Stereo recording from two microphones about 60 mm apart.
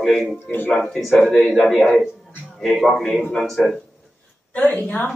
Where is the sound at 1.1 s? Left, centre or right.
Centre.